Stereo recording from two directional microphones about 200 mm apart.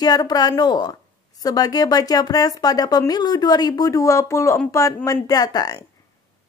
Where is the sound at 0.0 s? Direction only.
20° left (ahead or behind).